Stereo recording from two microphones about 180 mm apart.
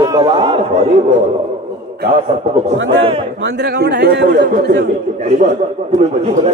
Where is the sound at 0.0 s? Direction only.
25° right (ahead or behind).